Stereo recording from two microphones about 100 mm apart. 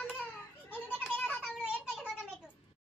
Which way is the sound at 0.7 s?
20° left (ahead or behind).